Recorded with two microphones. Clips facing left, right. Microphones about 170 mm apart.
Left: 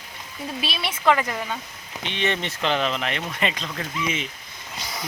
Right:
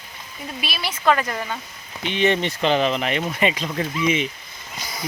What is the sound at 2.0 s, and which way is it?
Speech, 5° right (ahead or behind).